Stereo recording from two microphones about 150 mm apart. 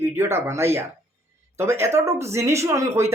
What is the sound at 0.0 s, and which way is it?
Speech, 15° right (ahead or behind).